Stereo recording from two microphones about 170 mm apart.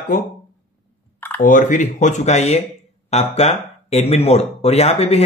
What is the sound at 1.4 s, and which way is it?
Speech, 50° left (ahead or behind).